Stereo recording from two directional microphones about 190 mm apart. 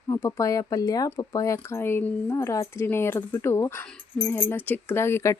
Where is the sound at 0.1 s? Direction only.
15° left (ahead or behind).